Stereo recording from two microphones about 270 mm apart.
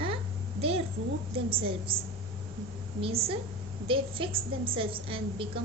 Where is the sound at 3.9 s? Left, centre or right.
Centre.